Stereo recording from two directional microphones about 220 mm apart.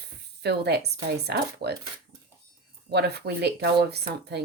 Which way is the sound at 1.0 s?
50° right (ahead or behind).